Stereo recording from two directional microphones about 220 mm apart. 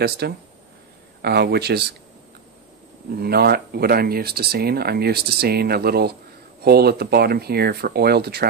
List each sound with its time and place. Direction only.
0.2 s speech: 50° right (ahead or behind)
3.2 s speech: 45° right (ahead or behind)